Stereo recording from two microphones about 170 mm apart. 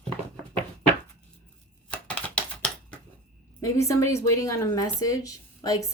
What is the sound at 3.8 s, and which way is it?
Speech, 15° left (ahead or behind).